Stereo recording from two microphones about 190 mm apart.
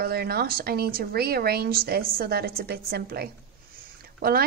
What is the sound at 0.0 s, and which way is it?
Speech, 55° right (ahead or behind).